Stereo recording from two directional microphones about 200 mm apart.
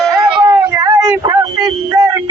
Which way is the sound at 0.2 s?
20° right (ahead or behind).